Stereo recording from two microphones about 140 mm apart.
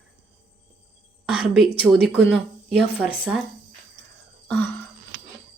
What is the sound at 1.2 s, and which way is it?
Speech, 10° right (ahead or behind).